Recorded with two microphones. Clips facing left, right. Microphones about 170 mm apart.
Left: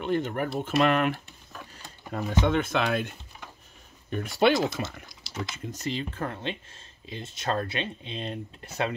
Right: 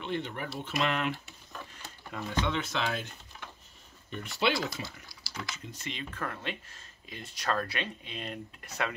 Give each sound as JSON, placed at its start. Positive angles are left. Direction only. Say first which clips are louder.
{"t": 0.0, "sound": "speech", "louder": "left 8 dB", "side_deg": 45}
{"t": 1.5, "sound": "a sound", "louder": "left 1 dB", "side_deg": 5}
{"t": 2.4, "sound": "speech", "louder": "left 8 dB", "side_deg": 50}
{"t": 4.1, "sound": "speech", "louder": "left 8 dB", "side_deg": 50}
{"t": 4.8, "sound": "speech", "louder": "left 7 dB", "side_deg": 20}
{"t": 5.7, "sound": "speech", "louder": "left 8 dB", "side_deg": 40}